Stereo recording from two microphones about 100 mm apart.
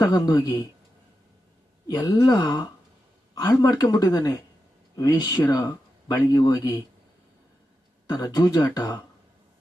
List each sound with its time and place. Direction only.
0.1 s speech: 45° left (ahead or behind)
1.9 s speech: 35° left (ahead or behind)
8.0 s speech: 40° left (ahead or behind)